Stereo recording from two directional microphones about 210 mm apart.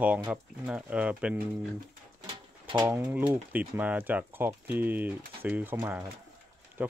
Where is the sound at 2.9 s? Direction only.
10° right (ahead or behind).